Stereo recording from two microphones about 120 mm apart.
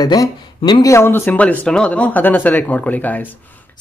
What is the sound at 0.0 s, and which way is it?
Speech, 30° left (ahead or behind).